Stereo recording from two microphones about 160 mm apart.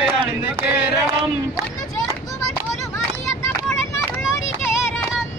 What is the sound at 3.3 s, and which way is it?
Vehicle, 20° left (ahead or behind).